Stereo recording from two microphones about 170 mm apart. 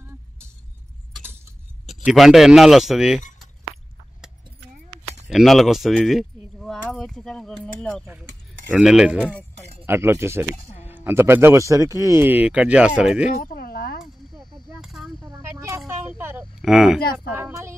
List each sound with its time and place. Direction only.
1.9 s speech: centre (ahead or behind)
5.3 s speech: centre (ahead or behind)
9.8 s speech: 15° right (ahead or behind)
13.4 s a sound: 55° left (ahead or behind)
14.3 s a sound: centre (ahead or behind)
15.2 s a sound: 15° right (ahead or behind)
16.6 s speech: 5° right (ahead or behind)
17.0 s speech: 65° left (ahead or behind)
17.4 s speech: 15° right (ahead or behind)